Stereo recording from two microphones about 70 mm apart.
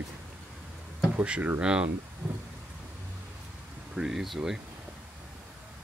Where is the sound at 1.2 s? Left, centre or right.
Right.